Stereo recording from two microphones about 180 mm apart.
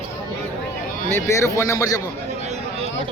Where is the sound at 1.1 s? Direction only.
15° left (ahead or behind).